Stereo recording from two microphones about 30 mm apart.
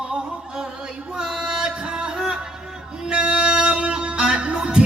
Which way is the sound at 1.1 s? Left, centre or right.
Right.